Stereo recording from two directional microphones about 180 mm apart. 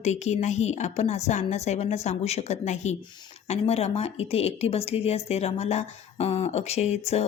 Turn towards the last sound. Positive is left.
turn(degrees=35)  # may be behind; listen again after turning